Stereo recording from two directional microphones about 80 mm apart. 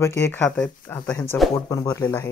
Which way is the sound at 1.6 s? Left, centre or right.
Left.